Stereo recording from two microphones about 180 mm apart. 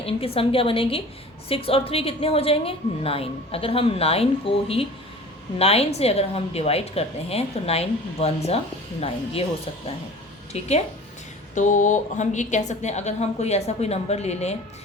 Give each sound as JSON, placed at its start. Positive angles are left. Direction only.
{"t": 0.0, "sound": "a woman's voice", "side_deg": 30}
{"t": 10.5, "sound": "a woman's voice", "side_deg": 35}